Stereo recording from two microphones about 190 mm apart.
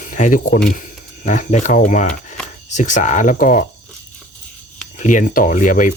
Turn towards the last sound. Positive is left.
turn(degrees=45)  # may be behind; listen again after turning